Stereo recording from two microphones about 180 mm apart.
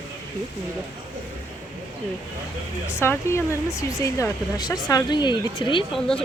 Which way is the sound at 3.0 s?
15° left (ahead or behind).